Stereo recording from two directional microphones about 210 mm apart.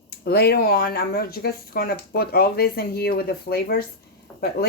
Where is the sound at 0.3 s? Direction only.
50° left (ahead or behind).